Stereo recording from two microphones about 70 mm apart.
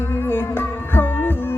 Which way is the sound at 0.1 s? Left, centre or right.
Left.